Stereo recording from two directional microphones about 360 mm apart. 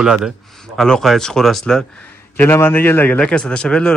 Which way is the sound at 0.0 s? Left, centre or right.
Centre.